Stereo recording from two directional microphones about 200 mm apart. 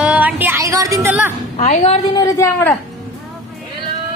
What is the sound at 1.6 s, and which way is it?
Speech, 35° left (ahead or behind).